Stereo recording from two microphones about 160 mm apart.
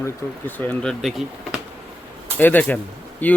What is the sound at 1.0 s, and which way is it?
Speech, 5° right (ahead or behind).